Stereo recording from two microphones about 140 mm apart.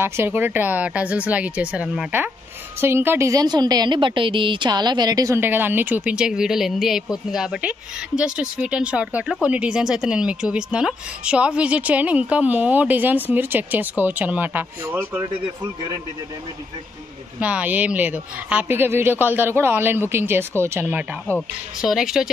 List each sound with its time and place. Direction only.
0.0 s a woman's voice: 15° right (ahead or behind)
17.4 s speech: 10° right (ahead or behind)